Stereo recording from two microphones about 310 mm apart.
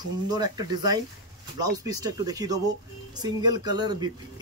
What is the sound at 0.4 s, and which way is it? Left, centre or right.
Speech, centre.